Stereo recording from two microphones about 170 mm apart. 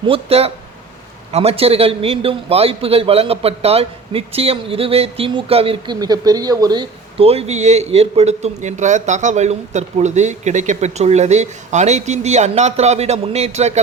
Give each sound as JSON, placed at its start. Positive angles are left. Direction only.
{"t": 0.1, "sound": "a man's voice", "side_deg": -35}